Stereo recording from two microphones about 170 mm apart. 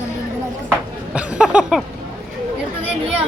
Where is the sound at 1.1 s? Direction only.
5° right (ahead or behind).